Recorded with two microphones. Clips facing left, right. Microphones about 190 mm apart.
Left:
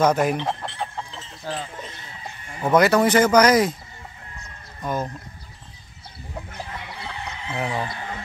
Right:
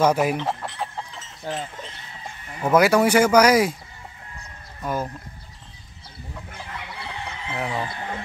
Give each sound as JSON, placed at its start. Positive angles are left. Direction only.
{"t": 0.0, "sound": "speech", "side_deg": -5}
{"t": 1.5, "sound": "speech", "side_deg": -20}
{"t": 2.6, "sound": "speech", "side_deg": -10}
{"t": 4.8, "sound": "speech", "side_deg": -5}
{"t": 7.5, "sound": "speech", "side_deg": 0}